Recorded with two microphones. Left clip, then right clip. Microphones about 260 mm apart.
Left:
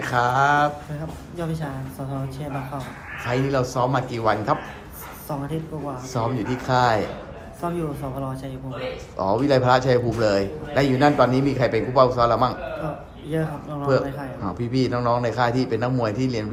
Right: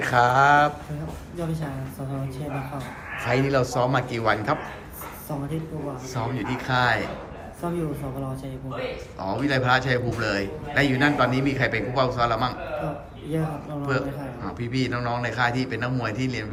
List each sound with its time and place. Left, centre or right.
0.0 s a woman's voice: centre
3.2 s speech: centre
6.1 s a man's voice: left
9.1 s a man's voice: left
13.3 s a woman's voice: centre
14.6 s a man's voice: left